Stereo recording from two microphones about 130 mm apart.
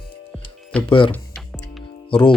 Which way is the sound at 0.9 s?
40° left (ahead or behind).